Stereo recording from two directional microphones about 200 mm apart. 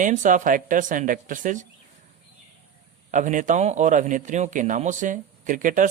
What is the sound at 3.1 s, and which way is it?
A man's voice, 40° right (ahead or behind).